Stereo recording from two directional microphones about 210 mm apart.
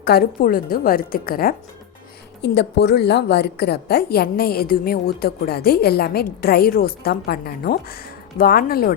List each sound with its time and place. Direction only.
0.0 s a woman's voice: 45° left (ahead or behind)